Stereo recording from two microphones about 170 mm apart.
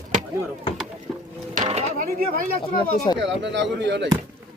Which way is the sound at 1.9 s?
60° right (ahead or behind).